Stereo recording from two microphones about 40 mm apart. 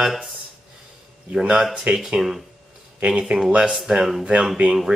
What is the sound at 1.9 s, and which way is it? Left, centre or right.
Speech, right.